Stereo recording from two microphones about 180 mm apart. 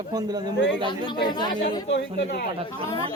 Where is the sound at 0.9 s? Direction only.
25° left (ahead or behind).